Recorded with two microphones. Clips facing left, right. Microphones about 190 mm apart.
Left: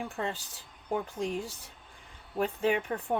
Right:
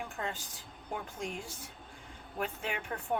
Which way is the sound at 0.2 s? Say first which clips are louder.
Left 4 dB; 30° left (ahead or behind).